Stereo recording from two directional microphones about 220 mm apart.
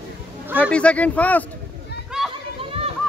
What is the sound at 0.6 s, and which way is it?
Speech, 5° left (ahead or behind).